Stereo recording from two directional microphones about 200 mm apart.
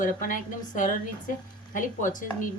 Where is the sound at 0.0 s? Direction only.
40° left (ahead or behind).